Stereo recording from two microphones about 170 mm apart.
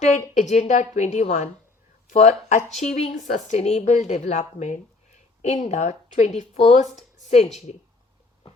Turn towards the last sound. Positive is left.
turn(degrees=40)  # may be behind; listen again after turning